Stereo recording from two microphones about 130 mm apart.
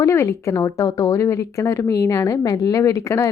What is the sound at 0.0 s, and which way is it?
Speech, 20° left (ahead or behind).